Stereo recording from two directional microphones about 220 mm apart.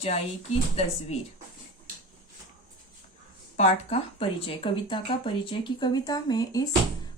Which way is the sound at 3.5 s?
30° left (ahead or behind).